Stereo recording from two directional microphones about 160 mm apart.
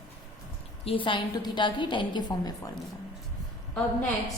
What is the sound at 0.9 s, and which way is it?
A woman's voice, 30° left (ahead or behind).